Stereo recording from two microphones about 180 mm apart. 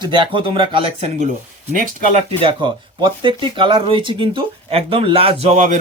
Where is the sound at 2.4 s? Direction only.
25° right (ahead or behind).